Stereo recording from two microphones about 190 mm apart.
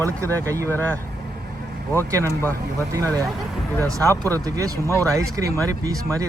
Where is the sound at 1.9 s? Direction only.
15° right (ahead or behind).